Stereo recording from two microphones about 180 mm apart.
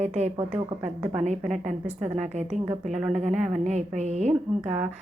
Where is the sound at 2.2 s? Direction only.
40° right (ahead or behind).